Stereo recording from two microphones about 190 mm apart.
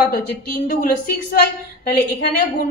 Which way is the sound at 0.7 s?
50° left (ahead or behind).